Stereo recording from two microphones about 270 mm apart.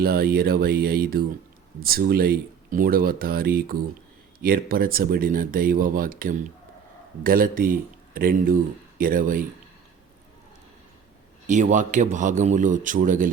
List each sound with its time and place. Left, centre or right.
0.0 s speech: right
11.4 s a man's voice: right